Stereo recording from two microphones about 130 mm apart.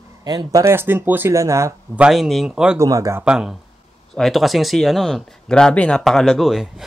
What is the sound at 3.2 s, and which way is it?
Speech, 5° right (ahead or behind).